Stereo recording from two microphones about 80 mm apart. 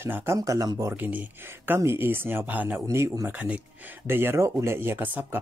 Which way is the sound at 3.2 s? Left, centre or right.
Centre.